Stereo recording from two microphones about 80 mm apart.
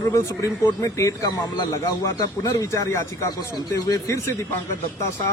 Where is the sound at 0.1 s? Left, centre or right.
Left.